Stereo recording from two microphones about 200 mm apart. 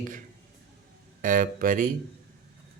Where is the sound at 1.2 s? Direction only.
40° right (ahead or behind).